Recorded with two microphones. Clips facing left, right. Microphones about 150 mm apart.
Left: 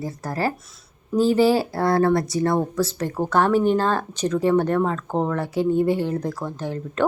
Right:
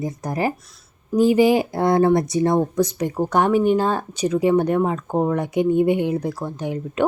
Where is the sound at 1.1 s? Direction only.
15° right (ahead or behind).